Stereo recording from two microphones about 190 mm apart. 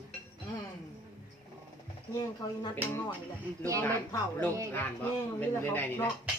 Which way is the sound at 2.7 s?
10° left (ahead or behind).